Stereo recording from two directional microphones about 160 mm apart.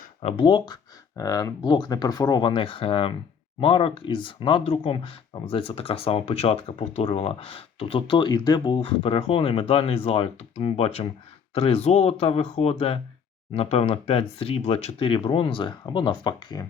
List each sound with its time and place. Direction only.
0.2 s speech: 35° left (ahead or behind)